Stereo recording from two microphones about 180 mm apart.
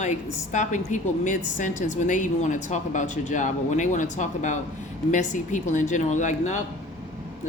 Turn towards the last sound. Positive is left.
turn(degrees=40)  # may be behind; listen again after turning